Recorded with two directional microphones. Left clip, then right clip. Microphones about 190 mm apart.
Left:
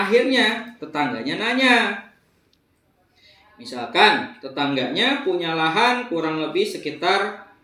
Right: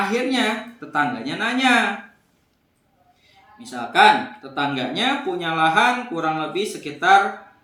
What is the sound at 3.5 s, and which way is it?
Speech, 5° right (ahead or behind).